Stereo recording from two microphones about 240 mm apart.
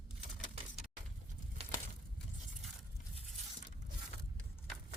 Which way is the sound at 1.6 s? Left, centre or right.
Right.